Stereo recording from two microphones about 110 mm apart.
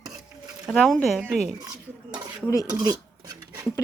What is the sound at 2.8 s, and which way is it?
Dishes, 35° right (ahead or behind).